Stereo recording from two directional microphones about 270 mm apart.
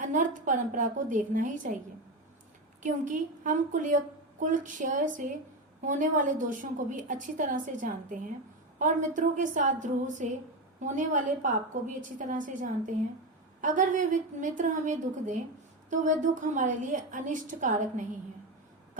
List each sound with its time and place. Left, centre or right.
0.0 s a woman's voice: right
2.8 s a woman's voice: right